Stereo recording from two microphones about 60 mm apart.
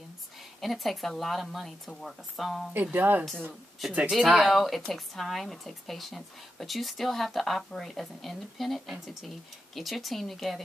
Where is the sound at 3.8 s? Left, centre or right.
Centre.